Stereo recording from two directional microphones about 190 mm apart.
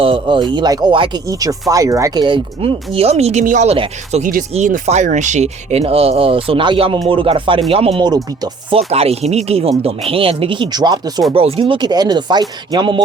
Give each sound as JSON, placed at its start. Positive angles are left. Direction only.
{"t": 0.0, "sound": "speech", "side_deg": -25}
{"t": 8.9, "sound": "speech", "side_deg": -30}